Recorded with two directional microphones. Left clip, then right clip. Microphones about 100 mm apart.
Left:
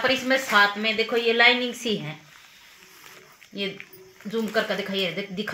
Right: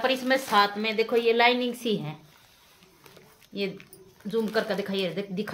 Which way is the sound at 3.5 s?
25° right (ahead or behind).